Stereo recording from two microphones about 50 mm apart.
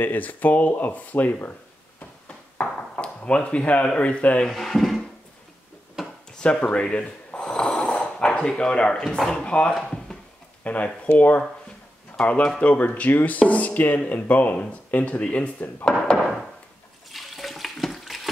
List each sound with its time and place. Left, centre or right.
0.0 s speech: left
2.6 s speech: left
4.5 s speech: centre
6.3 s snort: centre
8.0 s speech: centre
9.8 s a sound: centre
10.6 s speech: left
16.1 s a sound: centre
17.1 s water: centre